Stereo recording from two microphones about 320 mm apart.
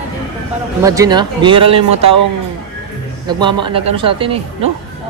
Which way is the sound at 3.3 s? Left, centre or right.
Centre.